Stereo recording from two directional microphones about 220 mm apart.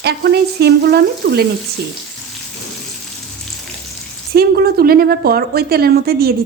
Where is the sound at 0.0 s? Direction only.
45° right (ahead or behind).